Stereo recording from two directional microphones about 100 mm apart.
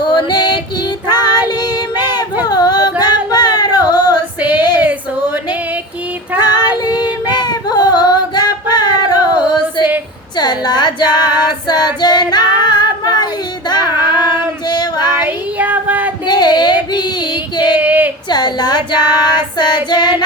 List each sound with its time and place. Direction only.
0.0 s female singing: 50° left (ahead or behind)
1.5 s child singing: 45° left (ahead or behind)
2.5 s yodeling: 40° left (ahead or behind)
3.0 s female singing: 45° left (ahead or behind)
4.4 s female singing: 15° right (ahead or behind)
6.3 s child singing: 15° right (ahead or behind)
6.8 s female singing: 45° left (ahead or behind)
15.3 s a sound: 15° right (ahead or behind)
16.2 s a sound: 45° left (ahead or behind)
16.9 s singing: 45° left (ahead or behind)
17.7 s a sound: 15° right (ahead or behind)
18.3 s female singing: 45° left (ahead or behind)